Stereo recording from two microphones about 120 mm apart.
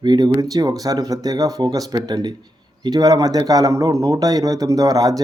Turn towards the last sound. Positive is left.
turn(degrees=-30)  # may be behind; listen again after turning